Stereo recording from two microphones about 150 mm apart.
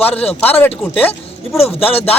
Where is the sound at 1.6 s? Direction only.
40° left (ahead or behind).